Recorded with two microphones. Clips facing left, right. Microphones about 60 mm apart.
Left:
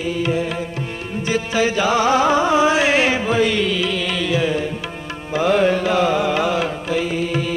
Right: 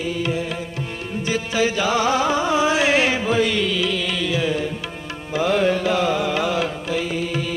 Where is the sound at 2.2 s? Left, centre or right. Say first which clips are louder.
Left 4 dB; left.